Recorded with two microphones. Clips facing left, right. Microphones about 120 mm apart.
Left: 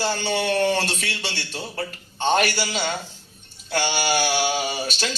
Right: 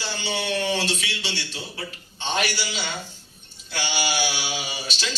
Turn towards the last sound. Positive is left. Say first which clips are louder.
# left 5 dB
turn(degrees=50)  # may be behind; listen again after turning